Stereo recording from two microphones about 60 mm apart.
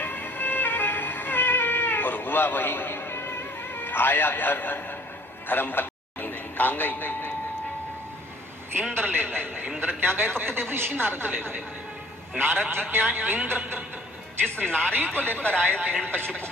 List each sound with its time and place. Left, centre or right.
0.0 s music: left
5.5 s a sound: left
8.9 s a woman's voice: right
14.7 s speech: centre